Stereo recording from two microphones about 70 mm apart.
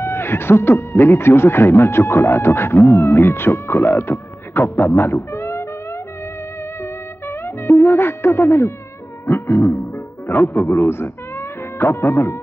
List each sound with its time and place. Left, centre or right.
0.0 s speech: left
6.8 s music: left
10.9 s speech: left